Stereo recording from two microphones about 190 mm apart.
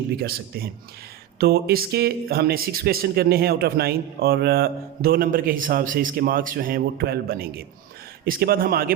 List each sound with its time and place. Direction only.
0.2 s speech: 55° right (ahead or behind)